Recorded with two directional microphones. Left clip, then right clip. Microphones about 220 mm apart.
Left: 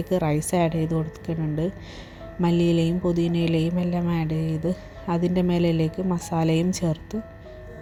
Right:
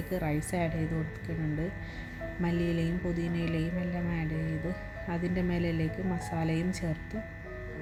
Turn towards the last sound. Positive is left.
turn(degrees=30)  # may be behind; listen again after turning